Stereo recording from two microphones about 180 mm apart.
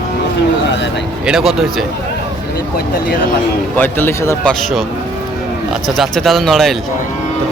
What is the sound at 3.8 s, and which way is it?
Speech, 10° left (ahead or behind).